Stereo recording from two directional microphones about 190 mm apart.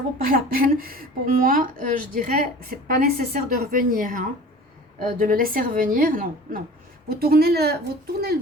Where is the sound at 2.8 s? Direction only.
50° right (ahead or behind).